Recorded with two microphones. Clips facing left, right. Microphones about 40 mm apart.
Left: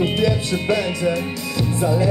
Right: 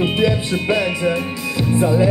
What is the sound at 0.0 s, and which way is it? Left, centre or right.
Speech, centre.